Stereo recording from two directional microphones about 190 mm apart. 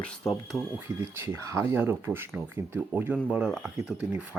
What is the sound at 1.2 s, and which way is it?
Speech, 15° right (ahead or behind).